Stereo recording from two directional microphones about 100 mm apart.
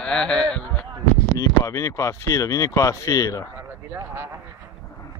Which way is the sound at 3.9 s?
25° right (ahead or behind).